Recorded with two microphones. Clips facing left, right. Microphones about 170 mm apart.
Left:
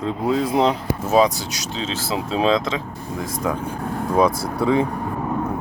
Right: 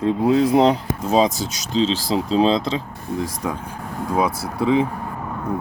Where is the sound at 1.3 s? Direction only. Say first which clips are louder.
Right 7 dB; 35° right (ahead or behind).